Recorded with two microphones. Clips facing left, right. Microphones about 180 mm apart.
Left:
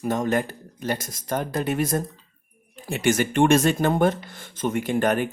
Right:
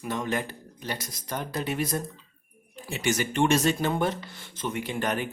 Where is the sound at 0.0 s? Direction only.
45° left (ahead or behind).